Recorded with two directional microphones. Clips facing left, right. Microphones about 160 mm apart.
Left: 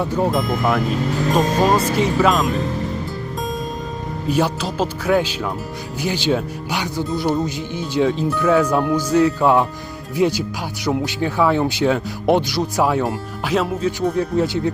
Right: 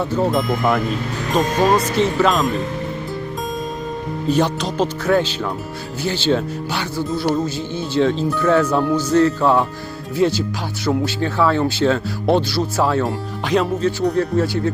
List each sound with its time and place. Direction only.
0.0 s speech: 15° left (ahead or behind)
0.3 s speech: centre (ahead or behind)
4.3 s speech: 10° left (ahead or behind)
14.2 s speech: 20° left (ahead or behind)